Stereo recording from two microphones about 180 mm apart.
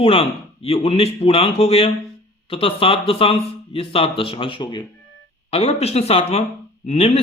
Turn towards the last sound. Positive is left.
turn(degrees=35)  # may be behind; listen again after turning